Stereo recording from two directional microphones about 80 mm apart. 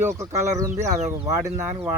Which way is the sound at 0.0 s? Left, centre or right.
Right.